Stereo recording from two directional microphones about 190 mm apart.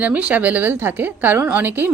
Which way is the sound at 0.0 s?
10° right (ahead or behind).